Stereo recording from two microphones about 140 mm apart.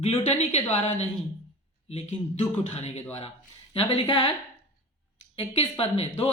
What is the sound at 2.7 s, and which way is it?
A man's voice, 50° left (ahead or behind).